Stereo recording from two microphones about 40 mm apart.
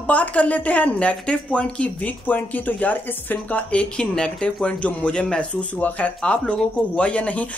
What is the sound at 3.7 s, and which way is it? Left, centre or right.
Speech, left.